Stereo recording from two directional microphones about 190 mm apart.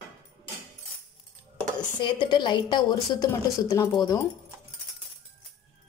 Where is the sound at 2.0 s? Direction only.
25° left (ahead or behind).